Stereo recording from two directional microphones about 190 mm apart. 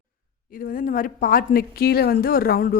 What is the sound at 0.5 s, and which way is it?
A woman's voice, 45° left (ahead or behind).